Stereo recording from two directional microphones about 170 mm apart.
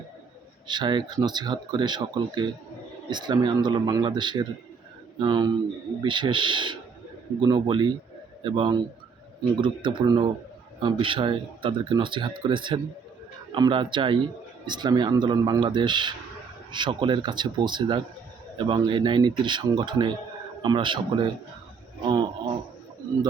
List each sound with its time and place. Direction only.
0.7 s speech: 25° right (ahead or behind)